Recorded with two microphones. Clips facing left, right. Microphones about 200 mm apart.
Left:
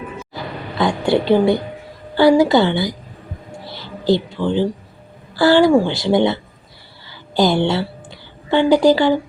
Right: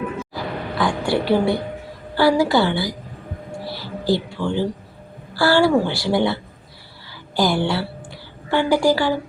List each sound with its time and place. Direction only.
0.8 s a woman's voice: 20° left (ahead or behind)
3.7 s a sound: 20° left (ahead or behind)
5.3 s a woman's voice: 20° left (ahead or behind)